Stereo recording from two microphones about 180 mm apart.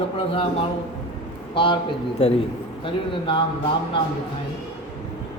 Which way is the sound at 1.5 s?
30° left (ahead or behind).